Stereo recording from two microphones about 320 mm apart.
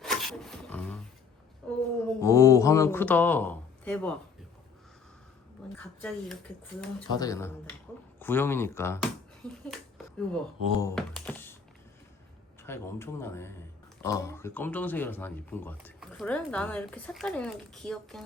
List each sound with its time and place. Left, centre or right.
0.0 s a sound: centre
5.7 s speech: centre
10.2 s speech: centre
12.6 s speech: centre